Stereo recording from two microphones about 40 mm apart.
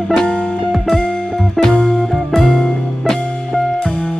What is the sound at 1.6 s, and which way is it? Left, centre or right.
Music, centre.